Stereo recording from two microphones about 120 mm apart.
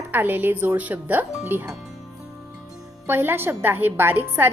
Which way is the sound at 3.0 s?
20° right (ahead or behind).